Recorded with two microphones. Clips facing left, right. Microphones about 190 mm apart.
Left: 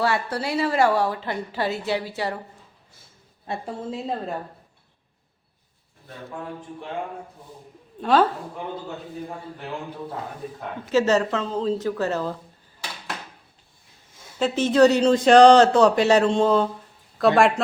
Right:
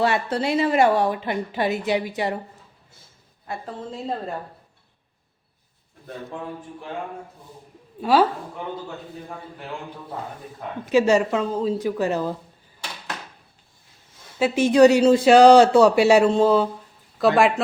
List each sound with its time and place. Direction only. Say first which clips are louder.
0.0 s a woman's voice: right 2 dB; 20° right (ahead or behind)
3.7 s a woman's voice: even; centre (ahead or behind)
8.0 s speech: right 1 dB; 10° right (ahead or behind)
10.8 s speech: right 2 dB; 15° right (ahead or behind)
14.3 s a woman's voice: right 2 dB; 10° right (ahead or behind)